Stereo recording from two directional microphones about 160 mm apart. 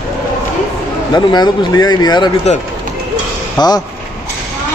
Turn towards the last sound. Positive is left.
turn(degrees=25)  # may be behind; listen again after turning